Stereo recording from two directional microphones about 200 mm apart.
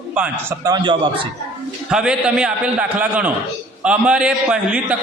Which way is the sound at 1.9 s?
5° right (ahead or behind).